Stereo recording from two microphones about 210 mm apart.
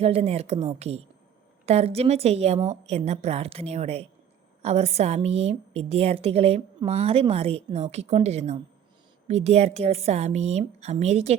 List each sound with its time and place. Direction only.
0.0 s a woman's voice: 30° right (ahead or behind)